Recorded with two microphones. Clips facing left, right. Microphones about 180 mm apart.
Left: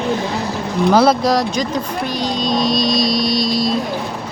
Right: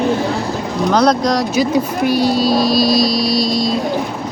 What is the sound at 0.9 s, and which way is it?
Speech, 5° left (ahead or behind).